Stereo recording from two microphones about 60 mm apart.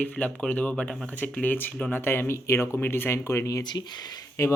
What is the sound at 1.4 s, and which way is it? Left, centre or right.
Speech, left.